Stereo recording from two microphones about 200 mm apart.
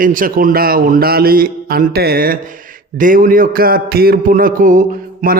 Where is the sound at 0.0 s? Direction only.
45° right (ahead or behind).